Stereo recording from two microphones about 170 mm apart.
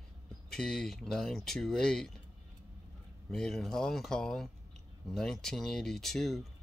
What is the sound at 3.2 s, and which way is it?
Speech, 5° left (ahead or behind).